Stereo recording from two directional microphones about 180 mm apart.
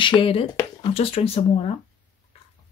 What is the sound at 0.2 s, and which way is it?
Speech, 30° left (ahead or behind).